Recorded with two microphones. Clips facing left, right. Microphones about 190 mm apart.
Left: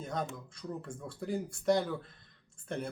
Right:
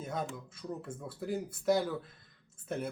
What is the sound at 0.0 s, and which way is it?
Speech, 5° right (ahead or behind).